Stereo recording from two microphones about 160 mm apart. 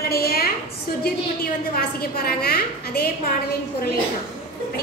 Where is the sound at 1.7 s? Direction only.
70° left (ahead or behind).